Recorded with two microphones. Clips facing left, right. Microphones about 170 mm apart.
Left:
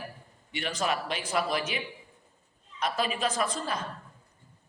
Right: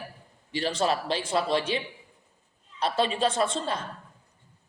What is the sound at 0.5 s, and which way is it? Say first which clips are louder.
A woman's voice: right 4 dB; 30° right (ahead or behind).